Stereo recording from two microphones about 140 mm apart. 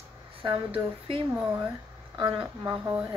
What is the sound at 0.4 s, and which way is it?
Speech, 35° right (ahead or behind).